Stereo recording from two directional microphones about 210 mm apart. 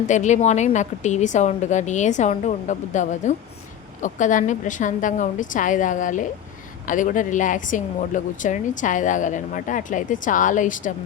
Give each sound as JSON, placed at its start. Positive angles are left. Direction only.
{"t": 0.1, "sound": "speech", "side_deg": 35}